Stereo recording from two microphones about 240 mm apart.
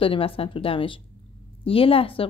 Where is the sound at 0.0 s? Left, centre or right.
Left.